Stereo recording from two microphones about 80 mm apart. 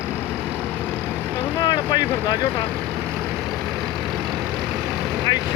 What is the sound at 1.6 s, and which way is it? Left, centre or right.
Speech, left.